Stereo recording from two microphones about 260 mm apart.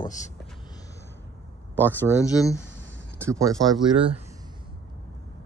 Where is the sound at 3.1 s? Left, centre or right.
Centre.